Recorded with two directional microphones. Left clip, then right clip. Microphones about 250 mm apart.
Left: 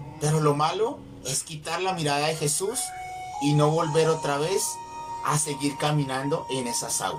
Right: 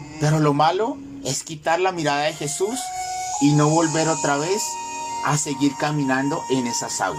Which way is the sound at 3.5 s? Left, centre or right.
Right.